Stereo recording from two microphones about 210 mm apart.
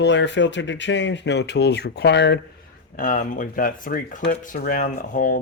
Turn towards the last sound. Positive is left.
turn(degrees=40)  # may be behind; listen again after turning